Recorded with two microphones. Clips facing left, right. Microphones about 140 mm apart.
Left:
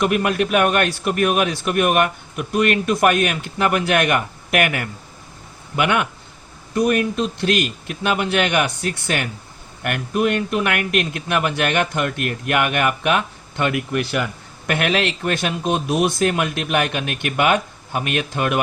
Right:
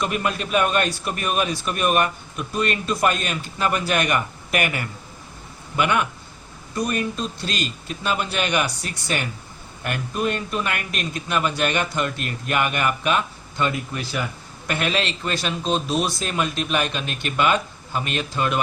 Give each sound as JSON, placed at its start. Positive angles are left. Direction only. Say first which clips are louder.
{"t": 0.0, "sound": "a man's voice", "louder": "left 6 dB", "side_deg": 60}